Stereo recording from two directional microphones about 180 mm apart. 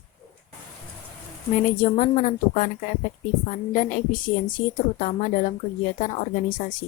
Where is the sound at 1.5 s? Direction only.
50° left (ahead or behind).